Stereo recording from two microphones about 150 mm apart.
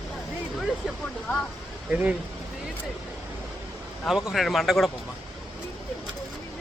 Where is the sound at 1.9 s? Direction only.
10° right (ahead or behind).